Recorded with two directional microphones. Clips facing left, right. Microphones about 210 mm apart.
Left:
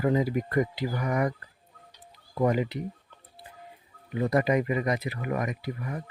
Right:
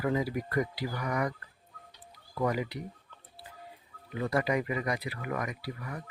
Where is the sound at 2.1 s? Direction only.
25° left (ahead or behind).